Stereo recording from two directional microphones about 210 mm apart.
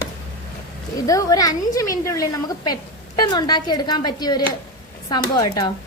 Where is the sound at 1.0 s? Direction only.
15° left (ahead or behind).